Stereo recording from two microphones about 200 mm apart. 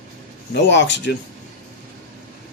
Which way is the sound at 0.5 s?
60° left (ahead or behind).